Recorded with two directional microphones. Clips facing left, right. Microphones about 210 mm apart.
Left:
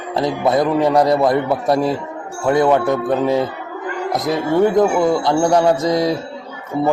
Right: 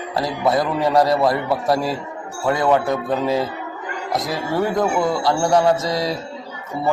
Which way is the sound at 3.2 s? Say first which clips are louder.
Left 3 dB; 20° left (ahead or behind).